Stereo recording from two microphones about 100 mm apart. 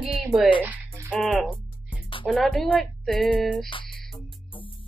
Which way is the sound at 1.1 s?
Centre (ahead or behind).